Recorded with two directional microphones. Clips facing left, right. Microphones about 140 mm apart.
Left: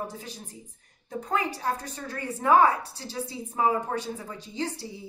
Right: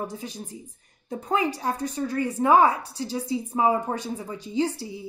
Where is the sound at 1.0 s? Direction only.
15° right (ahead or behind).